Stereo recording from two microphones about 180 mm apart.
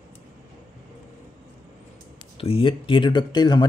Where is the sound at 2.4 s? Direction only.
30° left (ahead or behind).